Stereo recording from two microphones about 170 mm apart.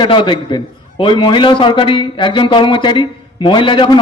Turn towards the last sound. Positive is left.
turn(degrees=30)  # may be behind; listen again after turning